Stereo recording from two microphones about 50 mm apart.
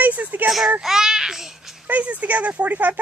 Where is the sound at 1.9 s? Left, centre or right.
Right.